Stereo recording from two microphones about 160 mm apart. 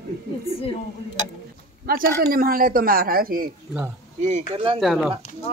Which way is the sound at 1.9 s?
65° right (ahead or behind).